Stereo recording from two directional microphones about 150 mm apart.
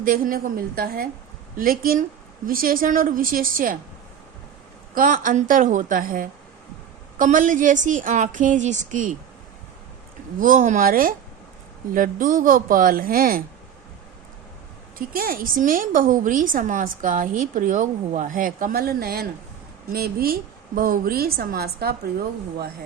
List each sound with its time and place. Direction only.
0.0 s speech: 70° right (ahead or behind)
1.5 s speech: 70° right (ahead or behind)
4.9 s a woman's voice: 65° right (ahead or behind)
10.4 s a woman's voice: 65° right (ahead or behind)
14.9 s a woman's voice: 70° right (ahead or behind); by 22.7 s 90° right